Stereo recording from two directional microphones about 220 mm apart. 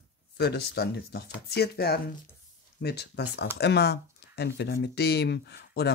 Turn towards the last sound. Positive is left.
turn(degrees=50)  # may be behind; listen again after turning